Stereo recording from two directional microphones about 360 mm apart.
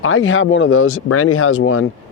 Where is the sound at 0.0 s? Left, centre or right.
Left.